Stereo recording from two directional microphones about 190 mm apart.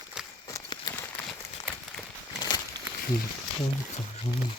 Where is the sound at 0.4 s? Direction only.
20° left (ahead or behind).